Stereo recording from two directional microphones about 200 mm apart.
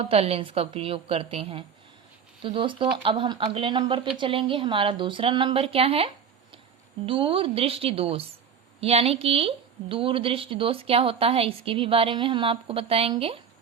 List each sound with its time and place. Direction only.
0.0 s a woman's voice: 30° right (ahead or behind)